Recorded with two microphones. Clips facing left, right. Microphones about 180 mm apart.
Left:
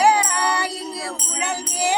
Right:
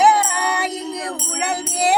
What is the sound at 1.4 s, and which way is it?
Music, 65° right (ahead or behind).